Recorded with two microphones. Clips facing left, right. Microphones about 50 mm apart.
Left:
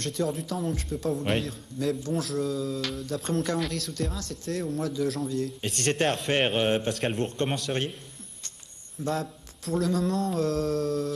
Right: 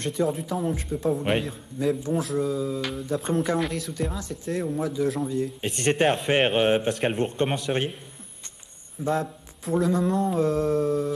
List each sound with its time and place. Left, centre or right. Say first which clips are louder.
0.0 s a man's voice: right 4 dB; centre
9.1 s speech: right 5 dB; centre